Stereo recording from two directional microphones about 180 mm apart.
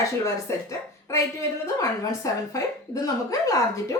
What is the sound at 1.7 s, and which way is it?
A woman's voice, 15° left (ahead or behind).